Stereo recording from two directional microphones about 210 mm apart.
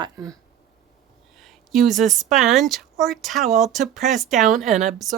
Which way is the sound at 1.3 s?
Centre (ahead or behind).